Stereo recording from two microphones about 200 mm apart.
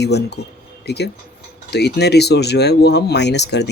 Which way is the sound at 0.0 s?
55° left (ahead or behind).